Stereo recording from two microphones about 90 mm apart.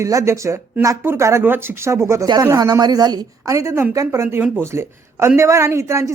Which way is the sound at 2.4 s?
45° right (ahead or behind).